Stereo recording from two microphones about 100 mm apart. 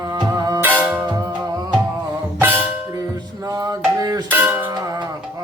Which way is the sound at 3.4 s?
35° right (ahead or behind).